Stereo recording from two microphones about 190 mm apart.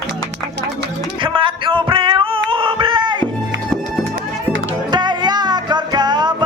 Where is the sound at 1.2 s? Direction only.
25° right (ahead or behind).